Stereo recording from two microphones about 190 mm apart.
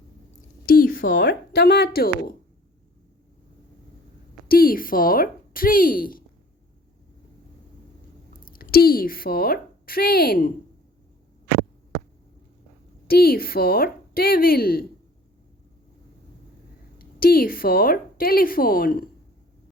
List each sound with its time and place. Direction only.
0.7 s a sound: 50° left (ahead or behind)
1.2 s speech: 70° left (ahead or behind)
4.4 s a woman's voice: 50° left (ahead or behind)
8.4 s a woman's voice: 50° left (ahead or behind)
13.1 s a woman's voice: 55° left (ahead or behind)
17.0 s a woman's voice: 50° left (ahead or behind)